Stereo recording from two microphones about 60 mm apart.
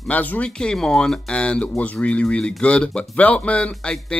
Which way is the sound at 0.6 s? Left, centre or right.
Centre.